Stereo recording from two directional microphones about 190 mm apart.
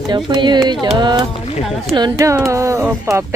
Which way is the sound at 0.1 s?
25° right (ahead or behind).